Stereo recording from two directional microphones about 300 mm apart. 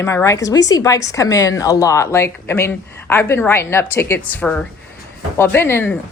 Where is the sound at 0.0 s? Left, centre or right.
Centre.